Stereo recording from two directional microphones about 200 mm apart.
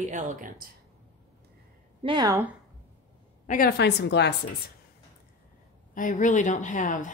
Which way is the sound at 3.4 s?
45° left (ahead or behind).